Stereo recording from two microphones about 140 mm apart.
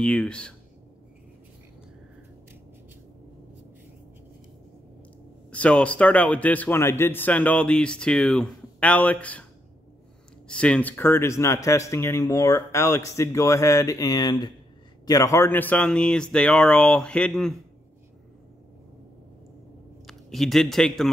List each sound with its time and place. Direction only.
0.0 s a man's voice: 5° left (ahead or behind)
5.5 s a man's voice: 10° left (ahead or behind)
10.5 s a man's voice: 10° left (ahead or behind)
20.1 s speech: centre (ahead or behind)